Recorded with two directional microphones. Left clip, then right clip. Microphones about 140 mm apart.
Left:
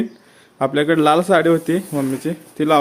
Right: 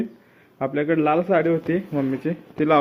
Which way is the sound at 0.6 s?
55° left (ahead or behind).